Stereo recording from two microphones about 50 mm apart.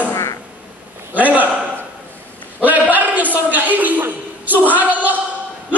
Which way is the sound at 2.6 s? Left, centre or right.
Right.